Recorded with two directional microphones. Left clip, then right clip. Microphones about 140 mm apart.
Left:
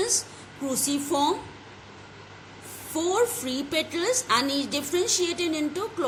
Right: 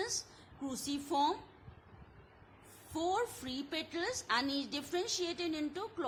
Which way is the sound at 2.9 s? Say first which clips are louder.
Left 11 dB; 45° right (ahead or behind).